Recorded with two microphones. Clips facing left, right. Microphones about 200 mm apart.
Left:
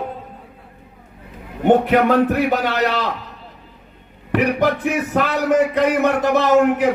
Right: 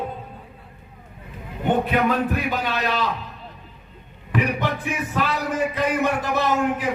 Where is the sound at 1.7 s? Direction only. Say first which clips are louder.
Left 7 dB; 75° left (ahead or behind).